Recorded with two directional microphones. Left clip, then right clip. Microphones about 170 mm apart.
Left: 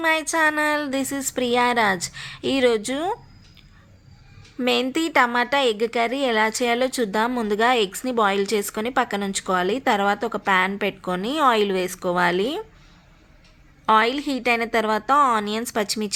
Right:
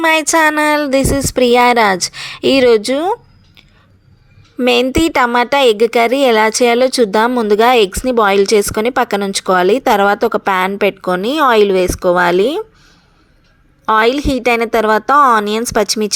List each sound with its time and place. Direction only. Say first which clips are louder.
0.0 s a woman's voice: right 9 dB; 45° right (ahead or behind)
13.8 s a woman's voice: right 7 dB; 35° right (ahead or behind)